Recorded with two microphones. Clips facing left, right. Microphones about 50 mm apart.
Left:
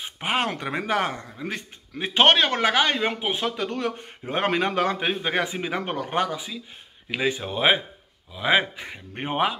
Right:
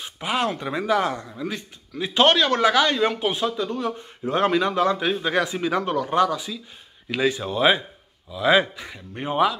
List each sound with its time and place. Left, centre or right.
0.2 s a man's voice: left
3.0 s speech: centre
3.5 s speech: left
4.3 s a man's voice: left
6.3 s speech: centre